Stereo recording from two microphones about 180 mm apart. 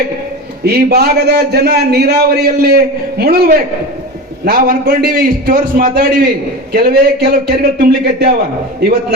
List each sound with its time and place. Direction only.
0.6 s a man's voice: 60° right (ahead or behind)